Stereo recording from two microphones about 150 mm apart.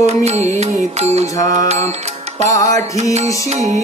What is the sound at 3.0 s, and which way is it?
Music, 50° right (ahead or behind).